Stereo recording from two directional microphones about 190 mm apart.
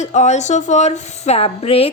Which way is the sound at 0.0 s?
40° left (ahead or behind).